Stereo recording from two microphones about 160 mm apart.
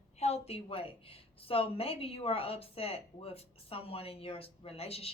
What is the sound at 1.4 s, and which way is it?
A woman's voice, 35° left (ahead or behind).